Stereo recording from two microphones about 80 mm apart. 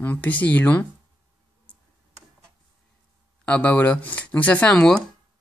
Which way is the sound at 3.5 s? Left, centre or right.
Centre.